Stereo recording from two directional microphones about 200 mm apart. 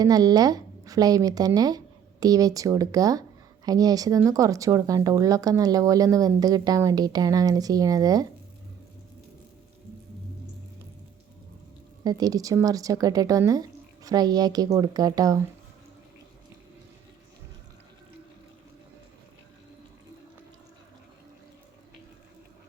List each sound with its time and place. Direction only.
0.0 s speech: 20° right (ahead or behind)
12.0 s speech: 20° right (ahead or behind)